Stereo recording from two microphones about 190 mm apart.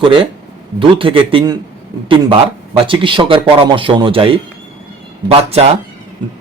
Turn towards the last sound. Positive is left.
turn(degrees=-30)  # may be behind; listen again after turning